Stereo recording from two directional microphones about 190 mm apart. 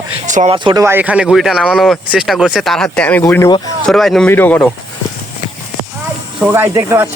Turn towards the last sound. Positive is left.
turn(degrees=-15)  # may be behind; listen again after turning